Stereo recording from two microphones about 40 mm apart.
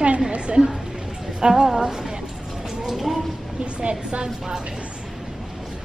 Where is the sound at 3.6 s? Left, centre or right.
Right.